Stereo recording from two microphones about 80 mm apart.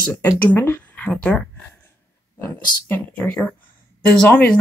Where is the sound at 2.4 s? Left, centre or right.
Left.